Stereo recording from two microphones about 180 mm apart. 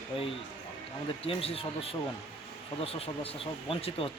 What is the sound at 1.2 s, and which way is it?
A woman's voice, 30° left (ahead or behind).